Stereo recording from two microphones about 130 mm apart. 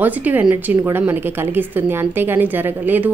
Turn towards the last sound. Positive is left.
turn(degrees=-15)  # may be behind; listen again after turning